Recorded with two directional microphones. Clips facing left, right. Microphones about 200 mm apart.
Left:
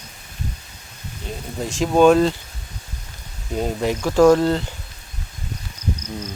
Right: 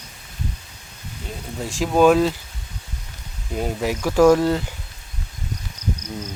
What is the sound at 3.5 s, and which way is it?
Speech, 5° right (ahead or behind).